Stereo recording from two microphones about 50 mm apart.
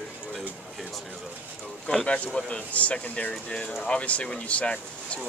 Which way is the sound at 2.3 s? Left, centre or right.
Left.